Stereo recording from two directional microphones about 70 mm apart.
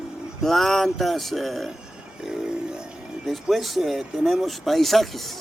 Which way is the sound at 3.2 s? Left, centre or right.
Centre.